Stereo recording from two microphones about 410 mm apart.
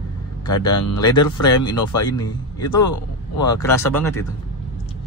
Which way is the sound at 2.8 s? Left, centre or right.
Left.